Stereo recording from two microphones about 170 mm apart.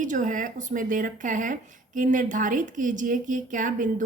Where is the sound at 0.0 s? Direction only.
50° right (ahead or behind).